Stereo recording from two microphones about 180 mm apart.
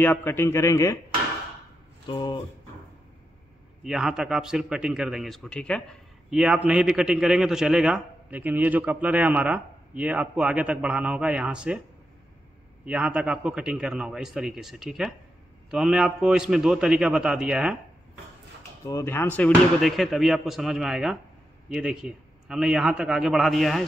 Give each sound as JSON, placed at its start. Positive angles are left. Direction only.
{"t": 0.0, "sound": "a man's voice", "side_deg": 10}
{"t": 2.0, "sound": "a sound", "side_deg": 25}
{"t": 3.8, "sound": "speech", "side_deg": -5}
{"t": 12.8, "sound": "speech", "side_deg": -5}
{"t": 18.9, "sound": "speech", "side_deg": 15}